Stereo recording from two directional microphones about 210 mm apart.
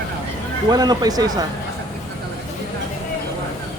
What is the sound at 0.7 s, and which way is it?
Speech, 20° right (ahead or behind).